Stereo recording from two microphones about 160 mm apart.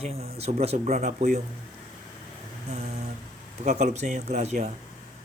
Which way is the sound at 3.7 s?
45° right (ahead or behind).